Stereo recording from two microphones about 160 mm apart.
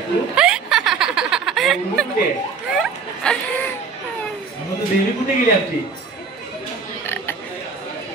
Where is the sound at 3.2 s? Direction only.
5° left (ahead or behind).